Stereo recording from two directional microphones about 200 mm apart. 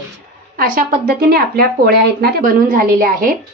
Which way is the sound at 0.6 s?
50° right (ahead or behind).